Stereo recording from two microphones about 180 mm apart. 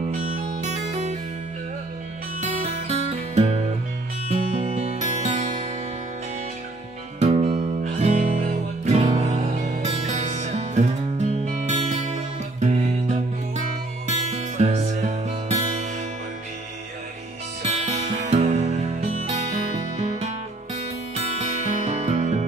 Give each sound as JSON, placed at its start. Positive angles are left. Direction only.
{"t": 0.6, "sound": "music", "side_deg": -40}
{"t": 2.4, "sound": "music", "side_deg": -40}
{"t": 7.2, "sound": "music", "side_deg": -35}
{"t": 17.6, "sound": "music", "side_deg": -40}
{"t": 21.4, "sound": "music", "side_deg": -35}